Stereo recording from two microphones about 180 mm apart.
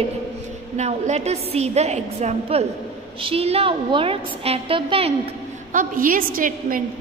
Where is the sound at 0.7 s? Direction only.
40° right (ahead or behind).